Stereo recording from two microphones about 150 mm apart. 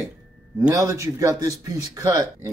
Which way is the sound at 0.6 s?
20° right (ahead or behind).